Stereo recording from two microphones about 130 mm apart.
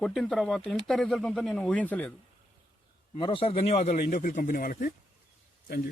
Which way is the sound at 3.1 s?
40° left (ahead or behind).